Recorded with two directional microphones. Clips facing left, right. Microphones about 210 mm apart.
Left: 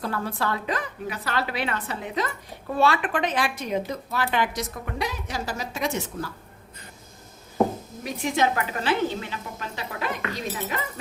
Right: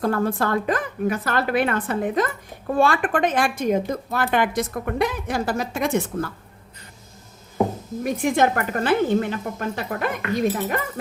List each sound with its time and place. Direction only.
0.0 s a woman's voice: 50° right (ahead or behind)
8.0 s a woman's voice: 50° right (ahead or behind)